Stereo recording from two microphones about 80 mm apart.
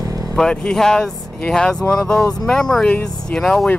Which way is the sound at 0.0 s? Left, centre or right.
Right.